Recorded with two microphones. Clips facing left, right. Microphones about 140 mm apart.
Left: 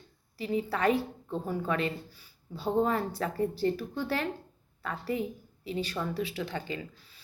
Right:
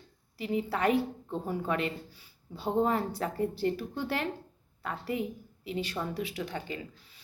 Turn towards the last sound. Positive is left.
turn(degrees=-15)  # may be behind; listen again after turning